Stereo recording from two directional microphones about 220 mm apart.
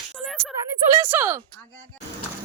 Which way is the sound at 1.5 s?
5° left (ahead or behind).